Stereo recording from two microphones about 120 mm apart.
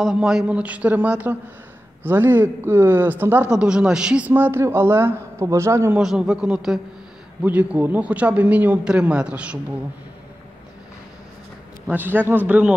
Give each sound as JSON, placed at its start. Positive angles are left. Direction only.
{"t": 0.0, "sound": "speech", "side_deg": -5}
{"t": 5.9, "sound": "a man's voice", "side_deg": -5}
{"t": 11.9, "sound": "speech", "side_deg": -15}